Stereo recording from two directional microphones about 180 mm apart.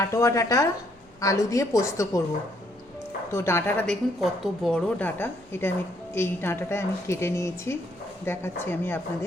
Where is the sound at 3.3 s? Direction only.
15° left (ahead or behind).